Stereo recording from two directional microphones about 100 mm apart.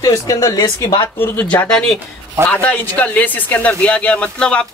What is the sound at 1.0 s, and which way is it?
Speech, 20° left (ahead or behind).